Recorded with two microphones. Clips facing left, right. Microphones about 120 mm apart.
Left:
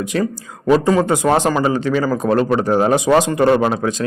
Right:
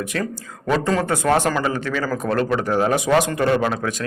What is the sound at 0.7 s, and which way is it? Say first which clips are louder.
Speech: left 6 dB; 15° left (ahead or behind).